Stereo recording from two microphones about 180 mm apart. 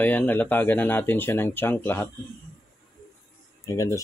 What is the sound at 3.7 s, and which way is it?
Speech, 20° left (ahead or behind).